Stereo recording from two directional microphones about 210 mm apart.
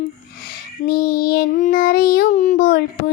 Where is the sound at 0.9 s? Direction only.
45° left (ahead or behind).